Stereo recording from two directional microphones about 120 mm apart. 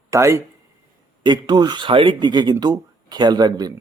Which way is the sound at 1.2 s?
35° right (ahead or behind).